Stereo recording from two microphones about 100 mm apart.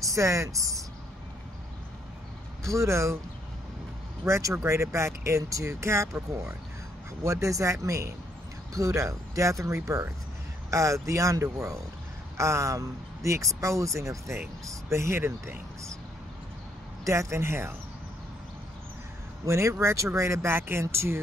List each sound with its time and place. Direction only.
0.0 s speech: 30° right (ahead or behind)
2.6 s speech: 30° right (ahead or behind)
4.3 s speech: 30° right (ahead or behind)
7.2 s speech: 30° right (ahead or behind)
17.0 s speech: 30° right (ahead or behind)
19.4 s speech: 30° right (ahead or behind)